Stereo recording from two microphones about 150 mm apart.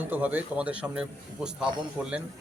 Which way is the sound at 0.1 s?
10° right (ahead or behind).